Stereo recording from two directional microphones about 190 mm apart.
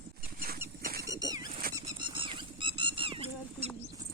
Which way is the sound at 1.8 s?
25° right (ahead or behind).